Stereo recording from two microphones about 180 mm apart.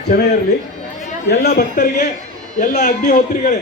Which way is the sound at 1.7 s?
50° left (ahead or behind).